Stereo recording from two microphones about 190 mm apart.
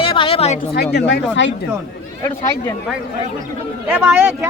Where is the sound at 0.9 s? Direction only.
65° left (ahead or behind).